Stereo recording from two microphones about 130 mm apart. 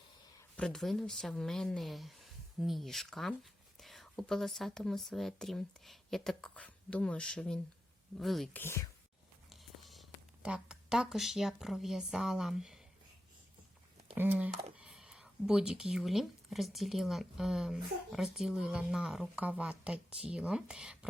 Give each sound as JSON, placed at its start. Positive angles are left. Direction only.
{"t": 0.5, "sound": "speech", "side_deg": 5}
{"t": 8.5, "sound": "speech", "side_deg": 20}
{"t": 9.5, "sound": "a sound", "side_deg": 0}
{"t": 10.5, "sound": "speech", "side_deg": -5}
{"t": 14.2, "sound": "speech", "side_deg": -15}